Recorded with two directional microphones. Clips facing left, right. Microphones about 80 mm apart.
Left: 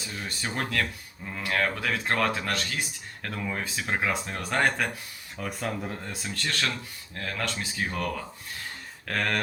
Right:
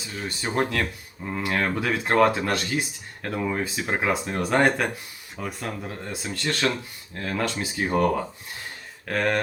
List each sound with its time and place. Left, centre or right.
0.1 s speech: centre
0.4 s speech: centre
6.2 s speech: centre
7.8 s speech: right
9.0 s speech: centre